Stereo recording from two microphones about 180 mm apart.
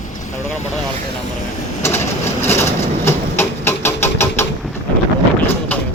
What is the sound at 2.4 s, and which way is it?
Vehicle, 15° left (ahead or behind).